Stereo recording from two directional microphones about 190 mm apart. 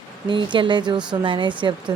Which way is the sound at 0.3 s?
25° right (ahead or behind).